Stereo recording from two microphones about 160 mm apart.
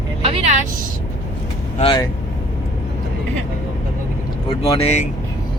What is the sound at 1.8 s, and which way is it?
Speech, 30° left (ahead or behind).